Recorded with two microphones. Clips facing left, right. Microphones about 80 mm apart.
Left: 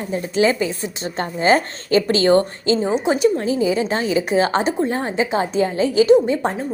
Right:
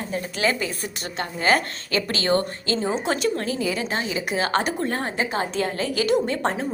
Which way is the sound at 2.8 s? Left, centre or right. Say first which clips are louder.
Left 5 dB; centre.